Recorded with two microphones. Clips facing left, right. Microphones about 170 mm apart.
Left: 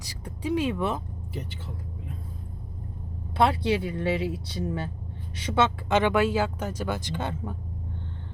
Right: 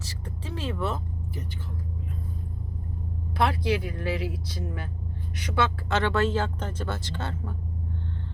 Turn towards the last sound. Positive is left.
turn(degrees=15)  # may be behind; listen again after turning